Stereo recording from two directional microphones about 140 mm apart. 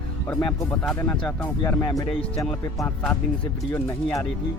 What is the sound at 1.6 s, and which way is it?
Speech, 20° left (ahead or behind).